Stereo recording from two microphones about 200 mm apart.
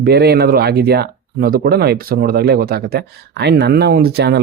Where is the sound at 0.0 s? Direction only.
55° right (ahead or behind).